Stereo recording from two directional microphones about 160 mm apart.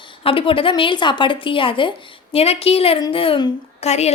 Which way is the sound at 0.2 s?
35° left (ahead or behind).